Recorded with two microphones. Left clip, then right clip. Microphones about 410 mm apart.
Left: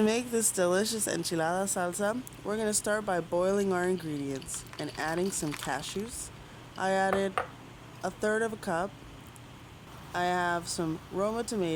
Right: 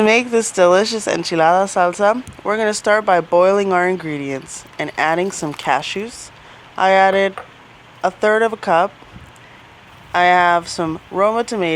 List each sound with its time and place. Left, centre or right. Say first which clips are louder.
0.0 s speech: right 15 dB; left
10.1 s speech: right 17 dB; left